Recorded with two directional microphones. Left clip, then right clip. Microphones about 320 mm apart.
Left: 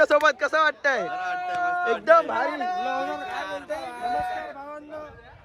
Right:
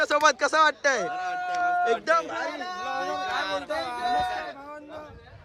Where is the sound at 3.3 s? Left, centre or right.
Right.